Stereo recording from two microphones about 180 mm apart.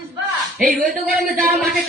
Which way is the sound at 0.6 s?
50° right (ahead or behind).